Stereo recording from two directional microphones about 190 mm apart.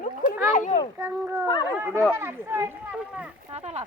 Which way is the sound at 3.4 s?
35° right (ahead or behind).